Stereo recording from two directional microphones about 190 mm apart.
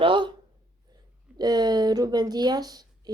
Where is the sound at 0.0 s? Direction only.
25° right (ahead or behind).